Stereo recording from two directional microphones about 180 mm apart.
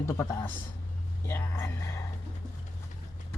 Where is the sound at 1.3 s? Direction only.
15° left (ahead or behind).